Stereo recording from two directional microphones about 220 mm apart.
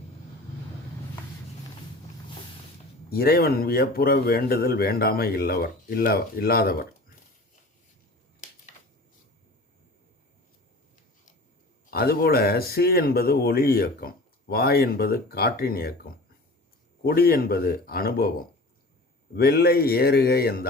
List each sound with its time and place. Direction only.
3.1 s speech: 45° left (ahead or behind)
11.9 s speech: 45° left (ahead or behind)
17.0 s speech: 45° left (ahead or behind)